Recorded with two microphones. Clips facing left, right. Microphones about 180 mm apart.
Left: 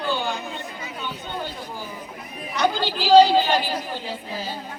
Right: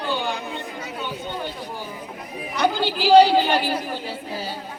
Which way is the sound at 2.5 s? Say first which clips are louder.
Right 1 dB; 10° right (ahead or behind).